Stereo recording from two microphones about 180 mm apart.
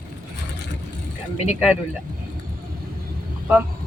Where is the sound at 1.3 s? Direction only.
35° left (ahead or behind).